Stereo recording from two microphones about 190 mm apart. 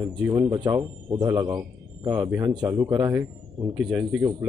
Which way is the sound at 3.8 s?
5° right (ahead or behind).